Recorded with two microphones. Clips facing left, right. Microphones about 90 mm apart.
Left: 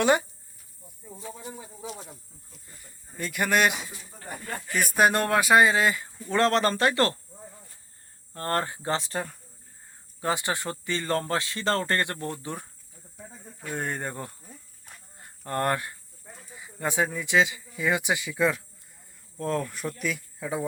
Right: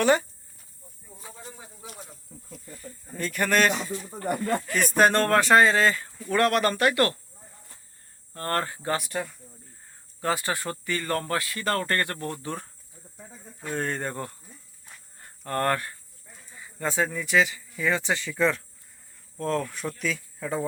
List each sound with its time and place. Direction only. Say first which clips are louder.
0.0 s speech: right 1 dB; 20° left (ahead or behind)
3.2 s speech: right 1 dB; 10° left (ahead or behind)
4.1 s speech: right 10 dB; 75° right (ahead or behind)
4.9 s speech: right 2 dB; 10° left (ahead or behind)
6.3 s speech: even; 25° left (ahead or behind)
8.3 s speech: even; 25° left (ahead or behind)
10.2 s speech: right 1 dB; 20° left (ahead or behind)
13.1 s speech: left 1 dB; 5° left (ahead or behind)